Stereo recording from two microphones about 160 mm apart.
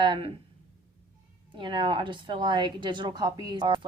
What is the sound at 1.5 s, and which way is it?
A woman's voice, 30° right (ahead or behind).